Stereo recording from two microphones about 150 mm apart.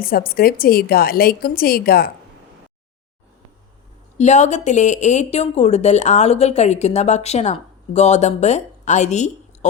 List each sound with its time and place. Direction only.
0.0 s a woman's voice: 75° left (ahead or behind)
4.2 s a woman's voice: 50° left (ahead or behind)